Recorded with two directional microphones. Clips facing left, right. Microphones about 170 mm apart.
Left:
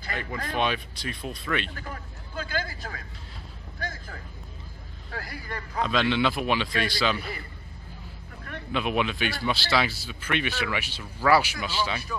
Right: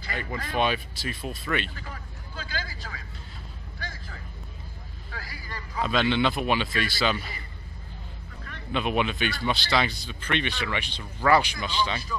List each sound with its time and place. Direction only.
0.1 s speech: centre (ahead or behind)
1.8 s speech: 50° left (ahead or behind)
3.8 s a sound: 45° left (ahead or behind)
5.1 s speech: 55° left (ahead or behind)
5.8 s speech: centre (ahead or behind)
8.7 s speech: centre (ahead or behind)